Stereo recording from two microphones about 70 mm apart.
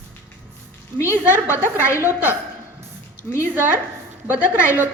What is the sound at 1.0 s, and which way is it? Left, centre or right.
A woman's voice, right.